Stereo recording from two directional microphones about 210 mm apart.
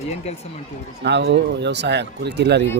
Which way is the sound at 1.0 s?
55° right (ahead or behind).